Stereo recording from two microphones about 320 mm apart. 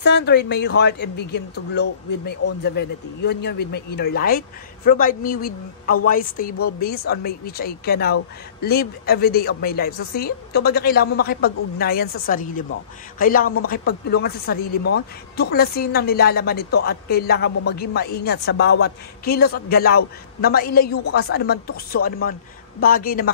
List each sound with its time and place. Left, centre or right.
0.0 s a woman's voice: left
14.8 s speech: left
15.3 s a woman's voice: left